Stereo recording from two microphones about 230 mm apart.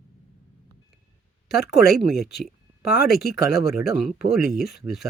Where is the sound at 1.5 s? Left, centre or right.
Left.